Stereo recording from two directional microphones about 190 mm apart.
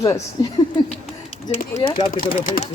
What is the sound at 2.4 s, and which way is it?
Speech, 45° left (ahead or behind).